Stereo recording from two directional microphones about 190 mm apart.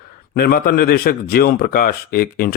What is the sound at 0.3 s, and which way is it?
Speech, 55° left (ahead or behind).